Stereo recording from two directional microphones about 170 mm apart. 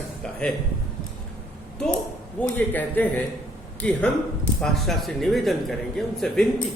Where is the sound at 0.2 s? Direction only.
5° left (ahead or behind).